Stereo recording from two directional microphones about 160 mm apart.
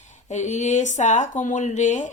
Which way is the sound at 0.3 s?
45° left (ahead or behind).